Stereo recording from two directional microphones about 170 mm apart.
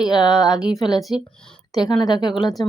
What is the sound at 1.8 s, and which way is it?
Speech, 25° left (ahead or behind).